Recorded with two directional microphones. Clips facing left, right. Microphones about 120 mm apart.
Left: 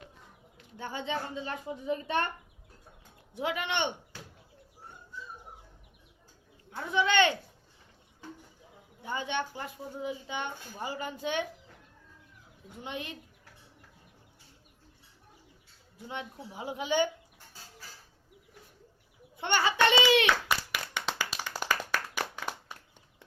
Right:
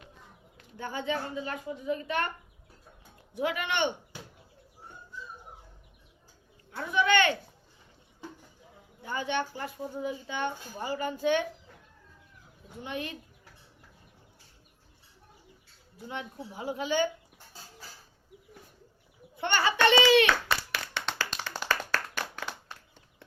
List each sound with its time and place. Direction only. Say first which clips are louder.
0.8 s a child's voice: right 2 dB; 20° left (ahead or behind)
3.3 s a child's voice: right 2 dB; 20° left (ahead or behind)
6.9 s a sound: right 1 dB; 20° left (ahead or behind)
9.0 s a child's voice: right 2 dB; 20° left (ahead or behind)
12.8 s a child's voice: right 3 dB; 20° left (ahead or behind)
16.0 s a child's voice: right 1 dB; 20° left (ahead or behind)
19.4 s clapping: right 1 dB; 15° left (ahead or behind)
22.7 s a sound: even; 10° left (ahead or behind)